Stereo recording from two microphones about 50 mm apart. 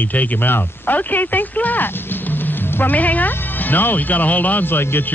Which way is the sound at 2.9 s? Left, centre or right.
Left.